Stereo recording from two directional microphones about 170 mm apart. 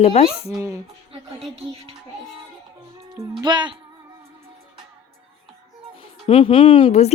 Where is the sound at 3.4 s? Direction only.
25° right (ahead or behind).